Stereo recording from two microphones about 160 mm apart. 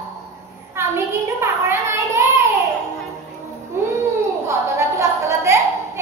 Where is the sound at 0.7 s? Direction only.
15° right (ahead or behind).